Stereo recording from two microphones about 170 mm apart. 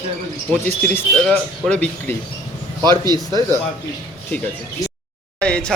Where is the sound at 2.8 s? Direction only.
25° right (ahead or behind).